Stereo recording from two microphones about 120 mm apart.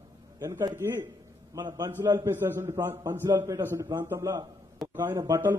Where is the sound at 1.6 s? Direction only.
30° right (ahead or behind).